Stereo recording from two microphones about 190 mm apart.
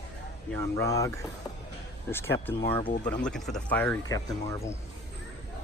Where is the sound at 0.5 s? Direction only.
15° left (ahead or behind).